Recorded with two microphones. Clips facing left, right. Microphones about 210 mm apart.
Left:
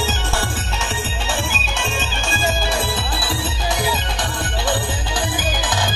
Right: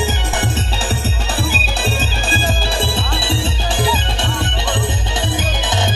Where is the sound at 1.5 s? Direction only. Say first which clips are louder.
Right 4 dB; 35° right (ahead or behind).